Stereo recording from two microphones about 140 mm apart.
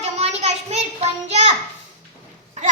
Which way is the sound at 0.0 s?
50° right (ahead or behind).